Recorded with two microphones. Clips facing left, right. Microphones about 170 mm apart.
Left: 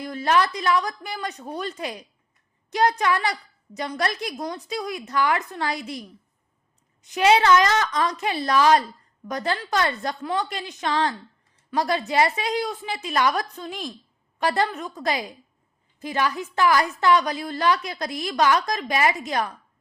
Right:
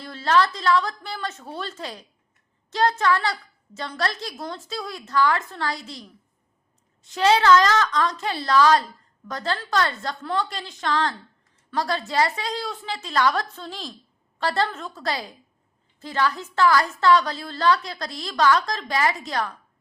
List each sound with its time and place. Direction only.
0.0 s a woman's voice: 15° left (ahead or behind)